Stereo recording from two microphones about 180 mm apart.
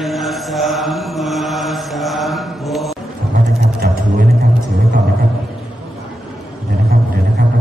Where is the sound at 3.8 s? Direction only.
55° right (ahead or behind).